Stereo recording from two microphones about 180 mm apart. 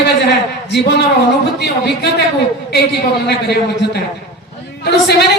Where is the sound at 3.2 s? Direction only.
65° left (ahead or behind).